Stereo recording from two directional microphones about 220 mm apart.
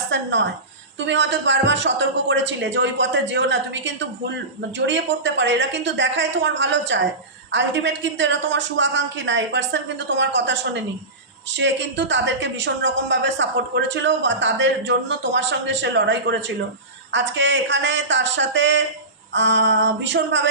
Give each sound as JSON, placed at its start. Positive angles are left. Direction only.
{"t": 0.1, "sound": "speech", "side_deg": -55}